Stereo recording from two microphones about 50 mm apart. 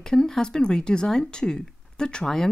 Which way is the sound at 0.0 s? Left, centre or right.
Centre.